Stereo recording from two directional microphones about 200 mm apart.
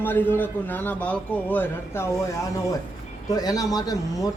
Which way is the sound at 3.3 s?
20° left (ahead or behind).